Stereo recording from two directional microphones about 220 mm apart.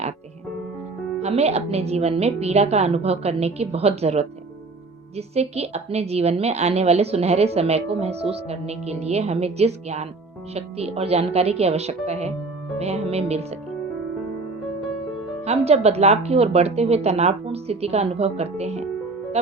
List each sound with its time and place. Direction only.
1.2 s a woman's voice: 30° right (ahead or behind)
15.4 s a woman's voice: 30° right (ahead or behind)